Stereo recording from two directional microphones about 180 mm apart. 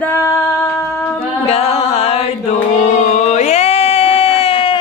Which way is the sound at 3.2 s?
40° left (ahead or behind).